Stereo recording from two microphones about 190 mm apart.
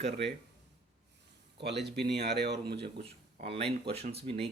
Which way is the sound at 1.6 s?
60° right (ahead or behind).